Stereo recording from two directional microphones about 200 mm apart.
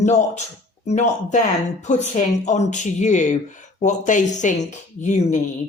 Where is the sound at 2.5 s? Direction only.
35° left (ahead or behind).